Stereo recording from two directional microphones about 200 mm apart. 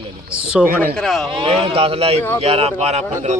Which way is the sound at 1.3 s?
25° right (ahead or behind).